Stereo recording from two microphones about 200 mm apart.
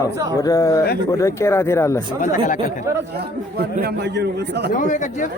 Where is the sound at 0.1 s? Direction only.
15° right (ahead or behind).